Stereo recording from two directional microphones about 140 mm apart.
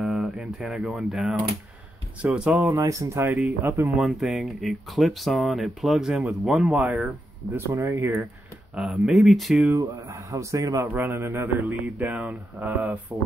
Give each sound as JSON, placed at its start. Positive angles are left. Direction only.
{"t": 0.0, "sound": "a man's voice", "side_deg": -5}
{"t": 2.6, "sound": "a man's voice", "side_deg": -20}
{"t": 4.0, "sound": "speech", "side_deg": 0}
{"t": 7.5, "sound": "a man's voice", "side_deg": -20}
{"t": 8.7, "sound": "speech", "side_deg": -5}
{"t": 9.8, "sound": "a man's voice", "side_deg": -20}